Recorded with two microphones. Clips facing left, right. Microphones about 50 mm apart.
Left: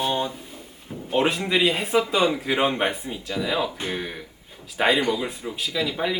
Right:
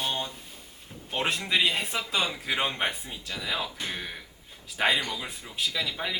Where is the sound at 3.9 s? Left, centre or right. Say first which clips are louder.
Left 6 dB; centre.